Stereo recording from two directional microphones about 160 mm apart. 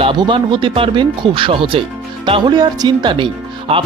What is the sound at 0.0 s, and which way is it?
Speech, 30° right (ahead or behind).